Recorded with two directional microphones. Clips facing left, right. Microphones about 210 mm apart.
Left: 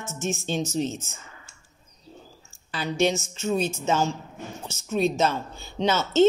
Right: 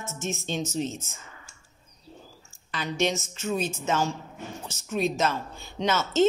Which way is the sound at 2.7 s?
30° left (ahead or behind).